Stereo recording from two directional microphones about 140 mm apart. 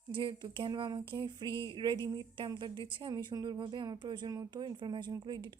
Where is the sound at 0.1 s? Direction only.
35° right (ahead or behind).